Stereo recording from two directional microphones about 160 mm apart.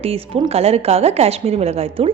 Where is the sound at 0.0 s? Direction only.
40° right (ahead or behind).